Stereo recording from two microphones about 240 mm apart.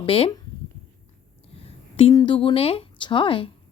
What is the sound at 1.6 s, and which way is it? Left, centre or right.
Speech, left.